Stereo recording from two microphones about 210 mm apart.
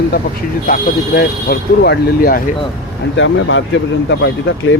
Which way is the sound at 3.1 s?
60° left (ahead or behind).